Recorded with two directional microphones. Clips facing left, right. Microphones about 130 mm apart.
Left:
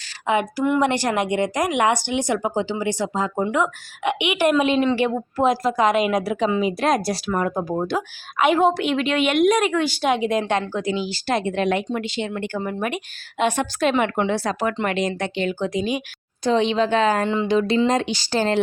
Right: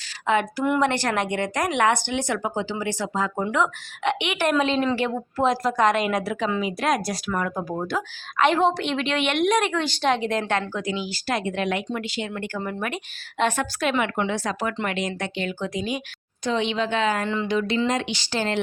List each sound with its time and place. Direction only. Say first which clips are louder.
0.3 s a woman's voice: left 2 dB; 15° left (ahead or behind)
8.4 s a woman's voice: left 2 dB; 10° left (ahead or behind)
13.7 s a woman's voice: left 4 dB; 30° left (ahead or behind)
16.4 s a woman's voice: left 5 dB; 35° left (ahead or behind)
17.2 s a woman's voice: left 4 dB; 20° left (ahead or behind)
17.5 s a woman's voice: left 5 dB; 35° left (ahead or behind)